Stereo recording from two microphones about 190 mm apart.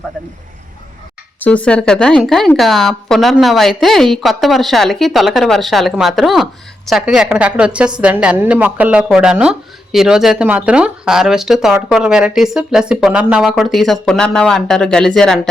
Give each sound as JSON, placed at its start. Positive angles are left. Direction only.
{"t": 1.4, "sound": "speech", "side_deg": 5}